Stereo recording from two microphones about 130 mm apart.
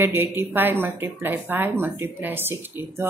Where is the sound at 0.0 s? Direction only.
15° right (ahead or behind).